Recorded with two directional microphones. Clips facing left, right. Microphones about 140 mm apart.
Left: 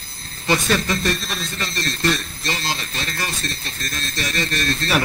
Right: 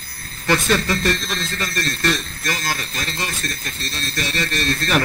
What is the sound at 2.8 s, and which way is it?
Speech, 35° right (ahead or behind).